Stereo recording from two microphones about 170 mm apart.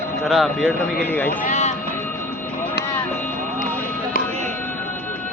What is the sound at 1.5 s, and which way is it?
Speech, 40° left (ahead or behind).